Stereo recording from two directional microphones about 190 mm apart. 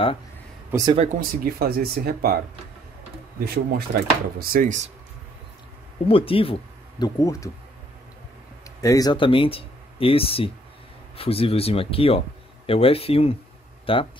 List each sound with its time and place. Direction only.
0.7 s speech: 20° right (ahead or behind)
0.9 s speech: 40° right (ahead or behind)
1.6 s speech: 55° right (ahead or behind)
3.3 s speech: 50° right (ahead or behind)
6.0 s speech: 30° left (ahead or behind)
7.2 s speech: 15° left (ahead or behind)
8.8 s speech: 20° left (ahead or behind)